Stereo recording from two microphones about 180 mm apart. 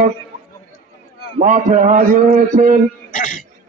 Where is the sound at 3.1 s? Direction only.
45° left (ahead or behind).